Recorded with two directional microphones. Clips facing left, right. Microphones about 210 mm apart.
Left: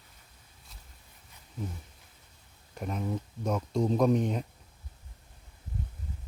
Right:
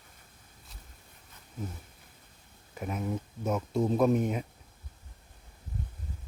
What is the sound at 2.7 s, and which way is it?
Speech, 5° right (ahead or behind).